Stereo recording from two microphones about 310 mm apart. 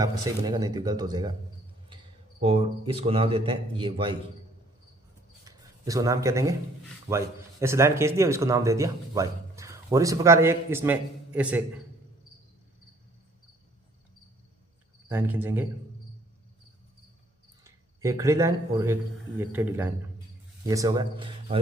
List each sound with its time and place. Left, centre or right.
0.0 s speech: centre
2.4 s speech: centre
5.5 s speech: centre
15.1 s speech: centre
17.6 s speech: centre